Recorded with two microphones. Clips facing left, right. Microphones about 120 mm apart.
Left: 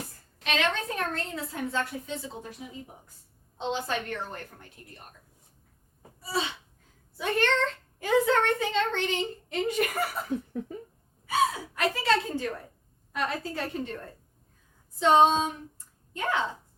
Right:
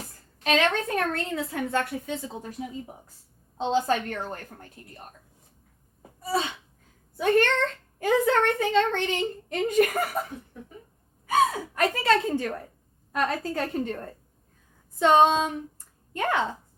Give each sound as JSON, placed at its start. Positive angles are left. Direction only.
{"t": 0.4, "sound": "a woman's voice", "side_deg": -40}
{"t": 0.9, "sound": "a woman's voice", "side_deg": -60}
{"t": 3.6, "sound": "a woman's voice", "side_deg": -40}
{"t": 6.2, "sound": "a child's voice", "side_deg": -45}
{"t": 11.3, "sound": "a woman's voice", "side_deg": -50}
{"t": 14.9, "sound": "a woman's voice", "side_deg": -55}